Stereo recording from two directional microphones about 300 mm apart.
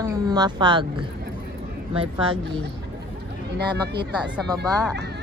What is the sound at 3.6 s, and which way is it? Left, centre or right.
Speech, right.